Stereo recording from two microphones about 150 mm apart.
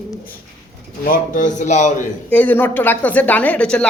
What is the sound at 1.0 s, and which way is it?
A man's voice, 65° left (ahead or behind).